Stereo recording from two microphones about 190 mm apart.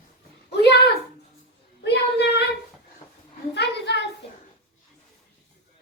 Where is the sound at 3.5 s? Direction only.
65° left (ahead or behind).